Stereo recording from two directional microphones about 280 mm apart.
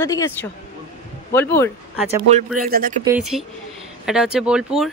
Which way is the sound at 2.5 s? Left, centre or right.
Right.